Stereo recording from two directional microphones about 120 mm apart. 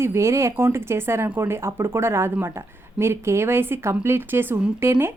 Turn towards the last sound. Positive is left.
turn(degrees=-20)  # may be behind; listen again after turning